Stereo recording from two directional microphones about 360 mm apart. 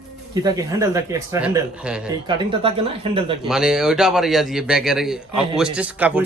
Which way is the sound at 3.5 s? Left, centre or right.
Centre.